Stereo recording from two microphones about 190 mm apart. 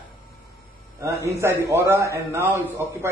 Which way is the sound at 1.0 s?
15° right (ahead or behind).